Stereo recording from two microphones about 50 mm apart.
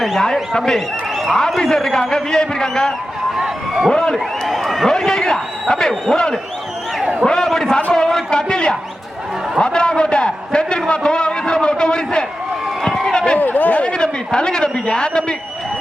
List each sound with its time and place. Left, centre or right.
0.0 s a man's voice: centre
0.5 s a man's voice: centre
3.3 s speech: centre
3.9 s a man's voice: centre
4.4 s a man's voice: centre
7.0 s a sound: right
7.3 s a sound: centre
9.6 s a man's voice: centre
12.8 s run: centre
13.1 s run: centre
13.4 s a sound: left
13.9 s a man's voice: centre